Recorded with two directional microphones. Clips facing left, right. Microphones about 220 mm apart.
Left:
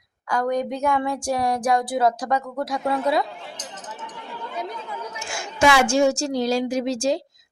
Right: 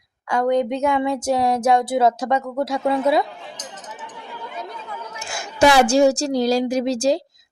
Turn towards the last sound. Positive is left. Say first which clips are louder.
# right 3 dB
turn(degrees=-35)  # may be behind; listen again after turning